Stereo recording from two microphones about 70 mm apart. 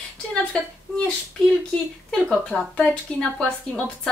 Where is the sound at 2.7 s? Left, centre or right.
Centre.